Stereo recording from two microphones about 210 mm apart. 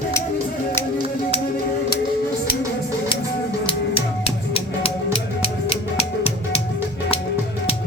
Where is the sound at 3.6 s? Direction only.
25° left (ahead or behind).